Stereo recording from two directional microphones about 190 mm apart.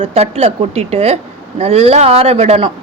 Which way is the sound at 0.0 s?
30° right (ahead or behind).